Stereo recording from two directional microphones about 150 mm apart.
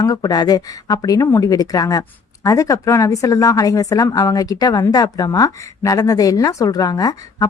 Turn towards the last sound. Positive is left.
turn(degrees=25)  # may be behind; listen again after turning